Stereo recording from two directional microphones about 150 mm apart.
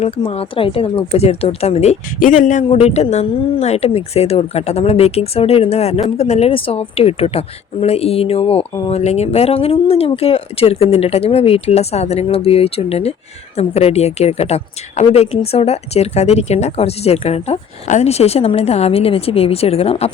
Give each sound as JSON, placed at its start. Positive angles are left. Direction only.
{"t": 0.0, "sound": "speech", "side_deg": 40}
{"t": 2.1, "sound": "speech", "side_deg": 60}
{"t": 2.6, "sound": "a woman's voice", "side_deg": 40}